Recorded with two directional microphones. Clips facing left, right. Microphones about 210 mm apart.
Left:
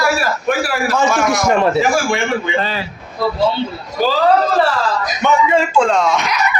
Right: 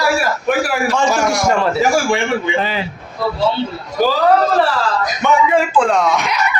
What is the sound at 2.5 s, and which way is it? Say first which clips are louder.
Speech: even; 15° right (ahead or behind).